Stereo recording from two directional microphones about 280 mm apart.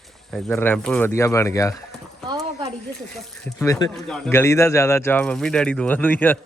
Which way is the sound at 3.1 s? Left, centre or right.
Centre.